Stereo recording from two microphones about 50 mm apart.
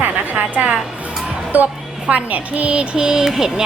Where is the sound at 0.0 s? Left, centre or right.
Right.